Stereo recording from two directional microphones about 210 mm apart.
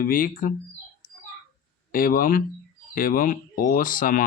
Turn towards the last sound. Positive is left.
turn(degrees=40)  # may be behind; listen again after turning